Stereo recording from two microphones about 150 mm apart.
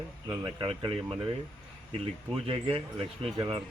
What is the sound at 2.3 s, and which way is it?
A man's voice, 35° right (ahead or behind).